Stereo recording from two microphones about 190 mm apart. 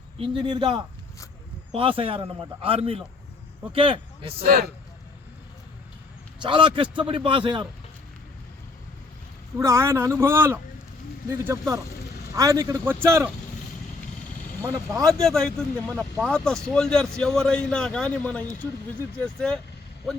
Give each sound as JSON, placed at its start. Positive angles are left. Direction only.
{"t": 0.2, "sound": "a man's voice", "side_deg": -25}
{"t": 4.4, "sound": "speech", "side_deg": -50}
{"t": 6.4, "sound": "a man's voice", "side_deg": -25}
{"t": 9.6, "sound": "a man's voice", "side_deg": -15}
{"t": 14.7, "sound": "a man's voice", "side_deg": -15}
{"t": 15.0, "sound": "a man's voice", "side_deg": 5}